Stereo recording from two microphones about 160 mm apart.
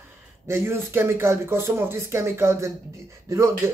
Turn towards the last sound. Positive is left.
turn(degrees=-20)  # may be behind; listen again after turning